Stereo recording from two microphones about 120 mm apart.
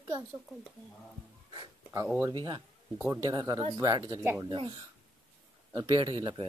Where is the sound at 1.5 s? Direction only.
35° right (ahead or behind).